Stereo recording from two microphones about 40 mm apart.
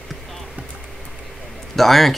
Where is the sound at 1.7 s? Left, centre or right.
Centre.